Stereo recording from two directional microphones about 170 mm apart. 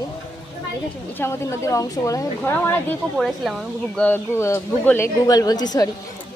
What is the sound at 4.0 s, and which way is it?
A woman's voice, 15° left (ahead or behind).